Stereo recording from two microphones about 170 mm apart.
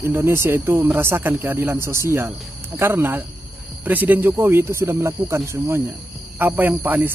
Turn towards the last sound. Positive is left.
turn(degrees=-10)  # may be behind; listen again after turning